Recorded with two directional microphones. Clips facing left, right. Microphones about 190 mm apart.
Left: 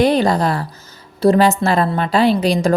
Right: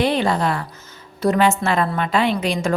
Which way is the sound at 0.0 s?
40° left (ahead or behind).